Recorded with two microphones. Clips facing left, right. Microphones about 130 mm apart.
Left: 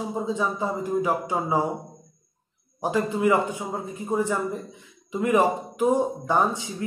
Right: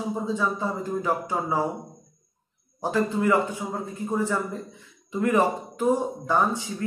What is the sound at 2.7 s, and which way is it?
Speech, 15° left (ahead or behind).